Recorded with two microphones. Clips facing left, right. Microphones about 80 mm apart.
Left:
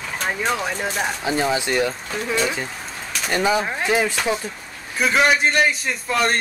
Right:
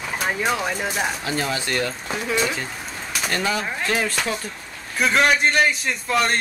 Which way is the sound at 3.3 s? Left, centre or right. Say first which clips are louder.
Left 5 dB; centre.